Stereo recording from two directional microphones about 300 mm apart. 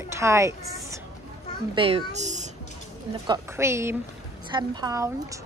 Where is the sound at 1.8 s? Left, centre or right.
Centre.